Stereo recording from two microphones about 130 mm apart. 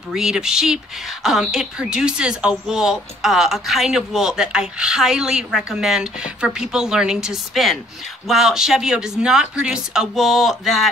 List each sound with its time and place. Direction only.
0.1 s speech: 5° right (ahead or behind)